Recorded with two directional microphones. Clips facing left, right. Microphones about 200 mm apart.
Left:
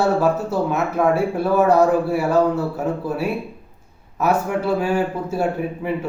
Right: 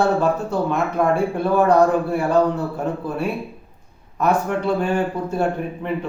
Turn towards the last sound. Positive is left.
turn(degrees=5)  # may be behind; listen again after turning